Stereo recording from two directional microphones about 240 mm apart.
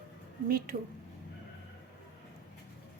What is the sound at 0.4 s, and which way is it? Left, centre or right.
Speech, right.